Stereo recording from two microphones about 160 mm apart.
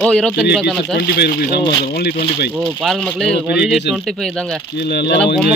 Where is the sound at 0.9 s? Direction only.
85° left.